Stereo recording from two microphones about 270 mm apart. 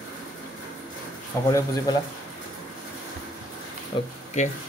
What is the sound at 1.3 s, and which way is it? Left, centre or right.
Speech, centre.